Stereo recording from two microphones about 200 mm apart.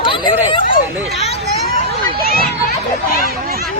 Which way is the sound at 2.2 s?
45° left (ahead or behind).